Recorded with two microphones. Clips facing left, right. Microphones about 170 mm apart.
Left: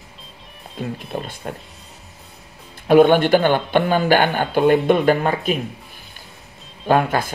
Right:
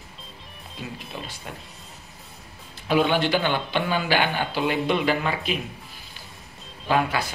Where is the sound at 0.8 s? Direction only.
45° left (ahead or behind).